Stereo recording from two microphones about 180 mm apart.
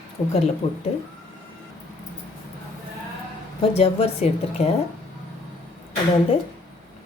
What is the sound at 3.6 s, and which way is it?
A woman's voice, 35° left (ahead or behind).